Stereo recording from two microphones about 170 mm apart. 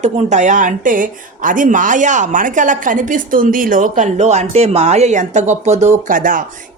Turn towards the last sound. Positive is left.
turn(degrees=-50)  # may be behind; listen again after turning